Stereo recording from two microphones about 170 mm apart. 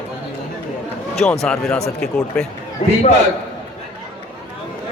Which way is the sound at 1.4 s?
5° left (ahead or behind).